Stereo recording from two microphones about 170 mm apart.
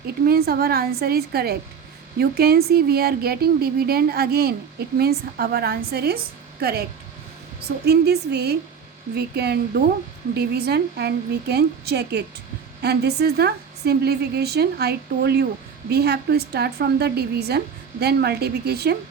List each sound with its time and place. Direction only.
0.3 s speech: 65° right (ahead or behind)
7.9 s a woman's voice: 75° right (ahead or behind)